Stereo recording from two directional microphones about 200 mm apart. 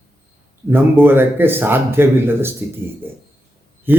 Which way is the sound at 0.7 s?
10° right (ahead or behind).